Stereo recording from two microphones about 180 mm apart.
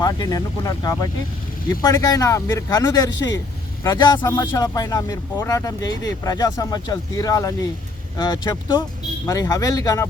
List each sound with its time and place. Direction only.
0.0 s speech: 20° left (ahead or behind)